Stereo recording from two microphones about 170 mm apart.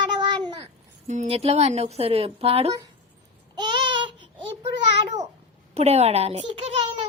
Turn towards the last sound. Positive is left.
turn(degrees=-35)  # may be behind; listen again after turning